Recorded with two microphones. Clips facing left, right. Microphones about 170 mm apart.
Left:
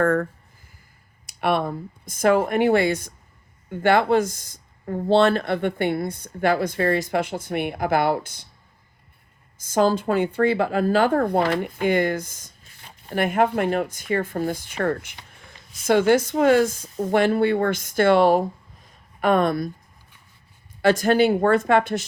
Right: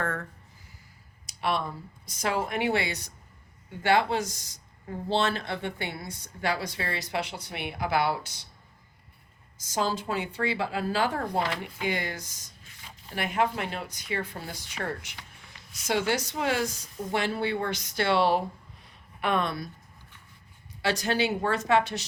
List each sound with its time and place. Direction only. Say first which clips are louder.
0.0 s speech: left 12 dB; 50° left (ahead or behind)
1.3 s a woman's voice: left 7 dB; 60° left (ahead or behind)
9.6 s a woman's voice: left 9 dB; 55° left (ahead or behind)
20.8 s a woman's voice: left 10 dB; 50° left (ahead or behind)